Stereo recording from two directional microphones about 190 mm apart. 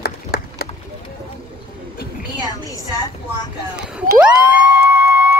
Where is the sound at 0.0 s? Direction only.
55° left (ahead or behind).